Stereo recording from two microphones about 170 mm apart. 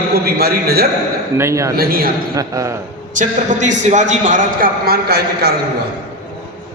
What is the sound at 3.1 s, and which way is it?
A man's voice, 50° right (ahead or behind).